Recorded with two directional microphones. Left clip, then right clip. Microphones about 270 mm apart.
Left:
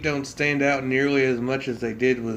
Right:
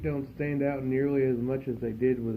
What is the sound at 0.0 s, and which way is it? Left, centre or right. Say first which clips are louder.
Speech: left 9 dB; centre.